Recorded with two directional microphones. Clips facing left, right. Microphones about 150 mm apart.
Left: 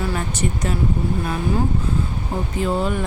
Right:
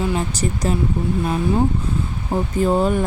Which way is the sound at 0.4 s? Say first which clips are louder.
Left 2 dB; 30° right (ahead or behind).